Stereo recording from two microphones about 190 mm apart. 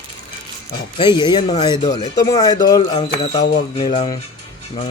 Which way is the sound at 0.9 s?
25° left (ahead or behind).